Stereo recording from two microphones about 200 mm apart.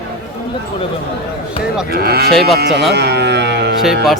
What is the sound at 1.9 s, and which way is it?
Cattle, 50° right (ahead or behind).